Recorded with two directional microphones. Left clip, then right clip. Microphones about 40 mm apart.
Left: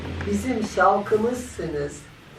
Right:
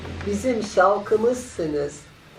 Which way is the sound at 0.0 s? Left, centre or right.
Centre.